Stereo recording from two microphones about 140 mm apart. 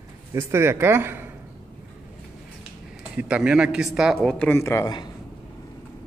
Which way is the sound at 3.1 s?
5° right (ahead or behind).